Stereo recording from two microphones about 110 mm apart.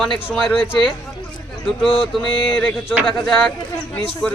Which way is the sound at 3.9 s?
10° left (ahead or behind).